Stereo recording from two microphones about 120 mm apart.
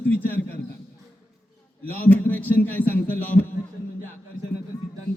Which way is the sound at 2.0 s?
15° left (ahead or behind).